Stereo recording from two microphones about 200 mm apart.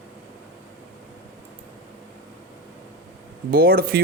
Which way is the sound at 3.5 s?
50° right (ahead or behind).